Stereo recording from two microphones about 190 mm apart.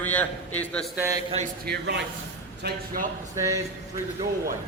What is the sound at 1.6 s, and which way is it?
Speech, 60° right (ahead or behind).